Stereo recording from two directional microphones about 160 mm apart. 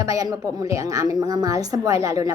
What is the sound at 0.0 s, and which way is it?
A woman's voice, 20° right (ahead or behind).